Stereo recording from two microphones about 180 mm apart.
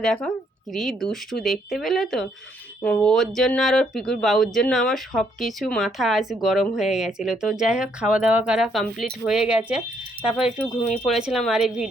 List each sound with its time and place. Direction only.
0.0 s speech: 5° left (ahead or behind)